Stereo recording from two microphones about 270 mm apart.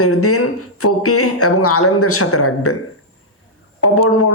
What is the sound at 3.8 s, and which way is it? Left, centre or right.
Speech, left.